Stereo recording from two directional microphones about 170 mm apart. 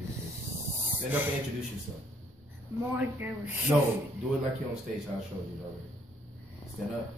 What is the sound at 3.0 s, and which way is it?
Speech, 10° right (ahead or behind).